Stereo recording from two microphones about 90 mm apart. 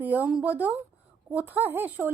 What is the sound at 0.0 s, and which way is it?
Speech, 20° right (ahead or behind).